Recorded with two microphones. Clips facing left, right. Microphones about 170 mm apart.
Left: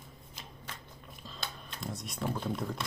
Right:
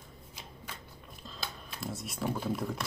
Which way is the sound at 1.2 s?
Centre (ahead or behind).